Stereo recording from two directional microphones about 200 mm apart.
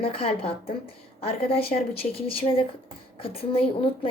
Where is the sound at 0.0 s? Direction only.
30° left (ahead or behind).